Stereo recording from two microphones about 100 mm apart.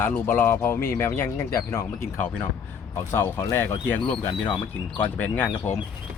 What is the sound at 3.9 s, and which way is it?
Speech, 10° left (ahead or behind).